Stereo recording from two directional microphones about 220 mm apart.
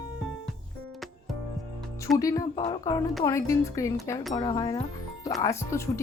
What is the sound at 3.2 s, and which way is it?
Speech, 15° left (ahead or behind).